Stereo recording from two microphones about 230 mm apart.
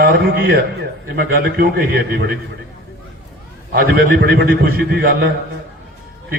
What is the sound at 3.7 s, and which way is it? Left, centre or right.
A man's voice, right.